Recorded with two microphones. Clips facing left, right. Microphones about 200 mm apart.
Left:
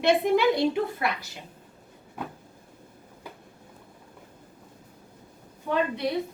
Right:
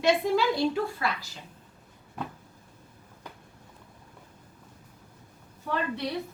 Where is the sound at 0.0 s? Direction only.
20° left (ahead or behind).